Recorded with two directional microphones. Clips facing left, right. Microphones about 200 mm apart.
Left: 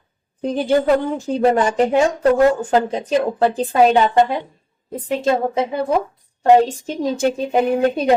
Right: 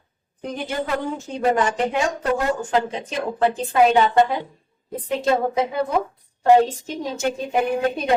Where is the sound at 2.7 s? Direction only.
40° left (ahead or behind).